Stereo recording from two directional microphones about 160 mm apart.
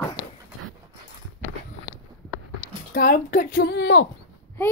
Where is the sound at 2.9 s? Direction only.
65° left (ahead or behind); by 4.0 s 90° left.